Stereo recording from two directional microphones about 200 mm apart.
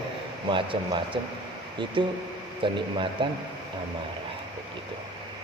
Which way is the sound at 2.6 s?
25° right (ahead or behind).